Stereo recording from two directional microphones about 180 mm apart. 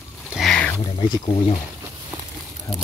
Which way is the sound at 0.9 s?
25° left (ahead or behind).